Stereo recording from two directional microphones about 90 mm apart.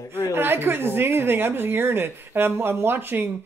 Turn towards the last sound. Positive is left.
turn(degrees=-25)  # may be behind; listen again after turning